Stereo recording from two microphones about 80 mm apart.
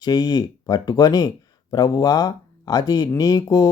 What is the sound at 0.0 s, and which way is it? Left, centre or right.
Speech, left.